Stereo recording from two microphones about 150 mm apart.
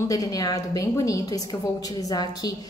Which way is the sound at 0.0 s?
25° left (ahead or behind).